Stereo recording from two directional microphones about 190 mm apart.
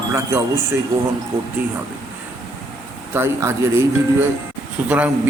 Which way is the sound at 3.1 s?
15° right (ahead or behind).